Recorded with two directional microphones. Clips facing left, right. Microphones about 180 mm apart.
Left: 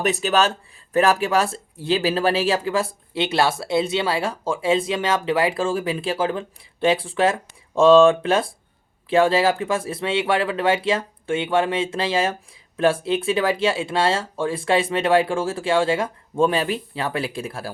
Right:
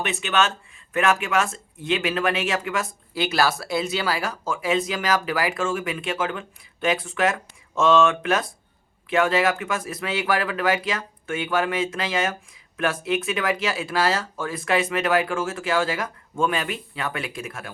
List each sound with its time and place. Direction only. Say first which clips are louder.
0.0 s speech: left 4 dB; 40° left (ahead or behind)